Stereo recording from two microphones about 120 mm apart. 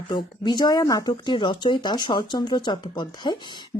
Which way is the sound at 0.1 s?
40° left (ahead or behind).